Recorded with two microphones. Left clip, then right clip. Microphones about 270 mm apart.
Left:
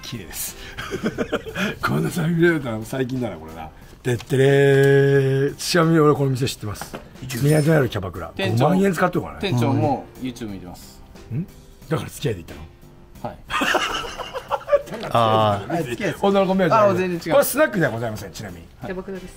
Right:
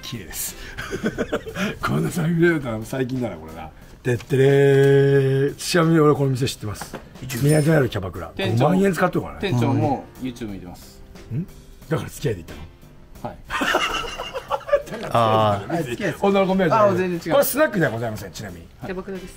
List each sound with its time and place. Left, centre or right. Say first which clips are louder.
0.0 s speech: even; centre
13.2 s speech: left 2 dB; centre